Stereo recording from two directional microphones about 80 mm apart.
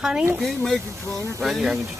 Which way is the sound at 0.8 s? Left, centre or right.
Right.